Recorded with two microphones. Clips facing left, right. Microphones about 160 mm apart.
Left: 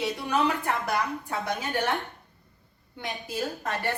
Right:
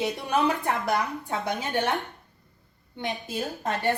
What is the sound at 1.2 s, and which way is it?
A woman's voice, 20° right (ahead or behind).